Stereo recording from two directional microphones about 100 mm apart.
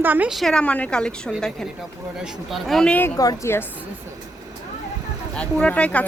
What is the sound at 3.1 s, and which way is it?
Speech, 35° left (ahead or behind).